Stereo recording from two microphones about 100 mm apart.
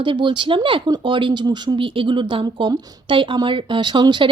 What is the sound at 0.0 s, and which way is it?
Speech, 55° right (ahead or behind).